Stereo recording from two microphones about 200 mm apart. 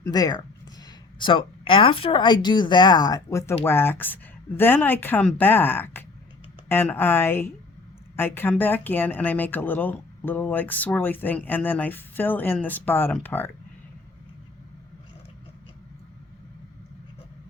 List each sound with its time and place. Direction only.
0.0 s speech: 20° left (ahead or behind)